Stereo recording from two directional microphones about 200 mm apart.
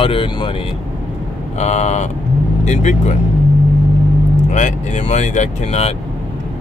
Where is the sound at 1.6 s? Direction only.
35° left (ahead or behind).